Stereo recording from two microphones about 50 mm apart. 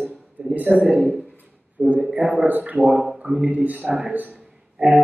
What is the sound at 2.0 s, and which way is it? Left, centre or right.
Speech, right.